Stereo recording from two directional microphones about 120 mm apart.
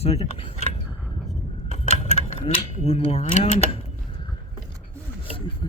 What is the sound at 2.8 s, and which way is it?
Speech, 50° left (ahead or behind).